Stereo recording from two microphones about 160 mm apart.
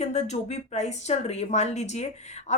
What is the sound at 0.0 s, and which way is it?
A woman's voice, 45° left (ahead or behind).